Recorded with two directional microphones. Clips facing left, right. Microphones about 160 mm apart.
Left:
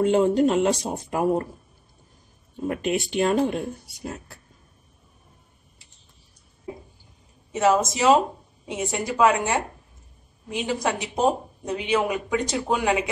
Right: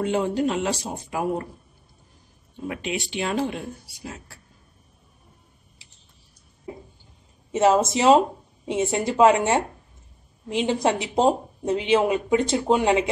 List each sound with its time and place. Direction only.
0.0 s speech: 45° left (ahead or behind)
2.6 s speech: 45° left (ahead or behind)
7.5 s speech: 25° right (ahead or behind)